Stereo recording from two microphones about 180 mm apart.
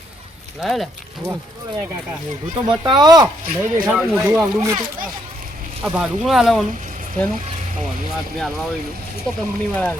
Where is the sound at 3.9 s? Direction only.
5° right (ahead or behind).